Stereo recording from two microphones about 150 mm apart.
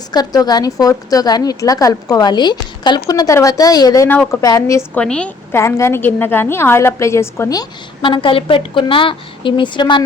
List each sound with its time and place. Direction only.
0.1 s a woman's voice: 25° left (ahead or behind)
4.9 s a woman's voice: 5° left (ahead or behind); by 10.0 s 30° left (ahead or behind)